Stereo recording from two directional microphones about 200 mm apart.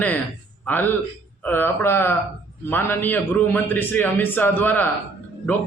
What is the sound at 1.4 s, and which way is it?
A man's voice, 10° left (ahead or behind).